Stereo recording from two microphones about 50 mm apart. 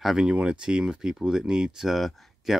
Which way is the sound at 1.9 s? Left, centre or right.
Centre.